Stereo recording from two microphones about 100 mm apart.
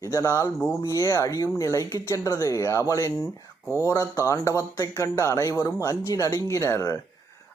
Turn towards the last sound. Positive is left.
turn(degrees=30)  # may be behind; listen again after turning